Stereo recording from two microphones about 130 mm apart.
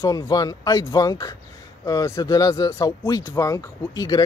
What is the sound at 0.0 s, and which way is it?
Speech, 30° left (ahead or behind).